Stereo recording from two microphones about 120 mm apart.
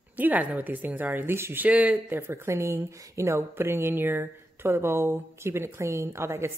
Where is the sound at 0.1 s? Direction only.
15° right (ahead or behind).